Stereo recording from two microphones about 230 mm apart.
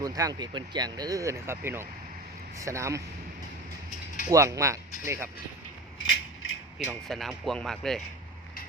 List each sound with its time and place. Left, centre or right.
0.0 s speech: centre
4.3 s speech: centre
6.1 s a sound: left
6.7 s speech: centre